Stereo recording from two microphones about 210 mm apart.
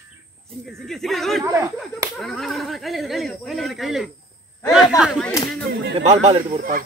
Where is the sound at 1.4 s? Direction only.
15° right (ahead or behind).